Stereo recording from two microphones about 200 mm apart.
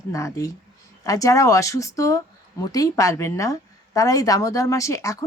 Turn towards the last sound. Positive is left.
turn(degrees=15)  # may be behind; listen again after turning